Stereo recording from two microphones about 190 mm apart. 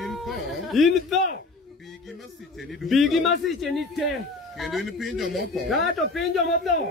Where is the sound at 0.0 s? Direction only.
Centre (ahead or behind).